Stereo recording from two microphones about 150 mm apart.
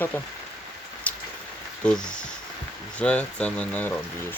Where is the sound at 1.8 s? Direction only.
5° left (ahead or behind).